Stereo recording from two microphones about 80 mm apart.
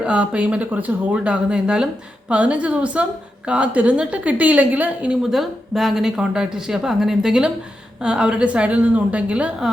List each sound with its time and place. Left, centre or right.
0.0 s a woman's voice: centre
5.3 s a woman's voice: centre